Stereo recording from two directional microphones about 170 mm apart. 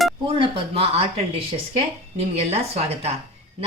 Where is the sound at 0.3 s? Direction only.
30° right (ahead or behind).